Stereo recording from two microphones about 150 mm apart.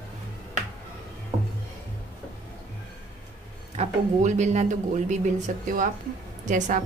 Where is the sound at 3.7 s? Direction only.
50° right (ahead or behind).